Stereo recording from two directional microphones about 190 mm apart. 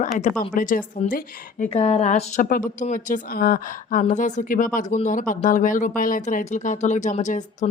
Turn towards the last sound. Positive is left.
turn(degrees=40)  # may be behind; listen again after turning